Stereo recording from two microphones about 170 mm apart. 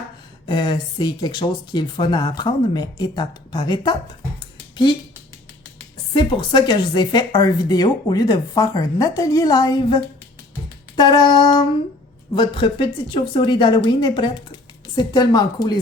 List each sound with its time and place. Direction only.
0.4 s speech: 25° left (ahead or behind)
6.1 s speech: 25° left (ahead or behind)